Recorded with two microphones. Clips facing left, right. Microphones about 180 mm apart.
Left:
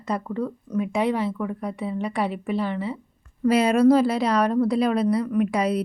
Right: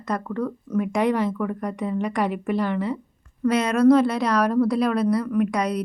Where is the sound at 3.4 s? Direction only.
5° left (ahead or behind).